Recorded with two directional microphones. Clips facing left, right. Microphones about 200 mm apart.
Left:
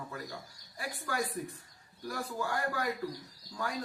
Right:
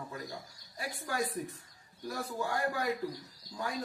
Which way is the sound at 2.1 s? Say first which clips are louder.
Even; 25° right (ahead or behind).